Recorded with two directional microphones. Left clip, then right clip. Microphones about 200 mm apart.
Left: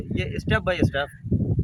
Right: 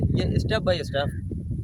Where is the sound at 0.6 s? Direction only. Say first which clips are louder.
Left 1 dB; 15° right (ahead or behind).